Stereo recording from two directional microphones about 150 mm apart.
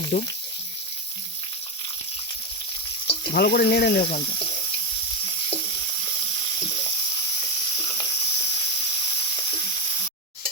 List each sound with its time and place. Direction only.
0.1 s speech: 80° left
3.3 s speech: 90° left
4.0 s speech: 35° left (ahead or behind)
5.5 s sizzle: 30° left (ahead or behind)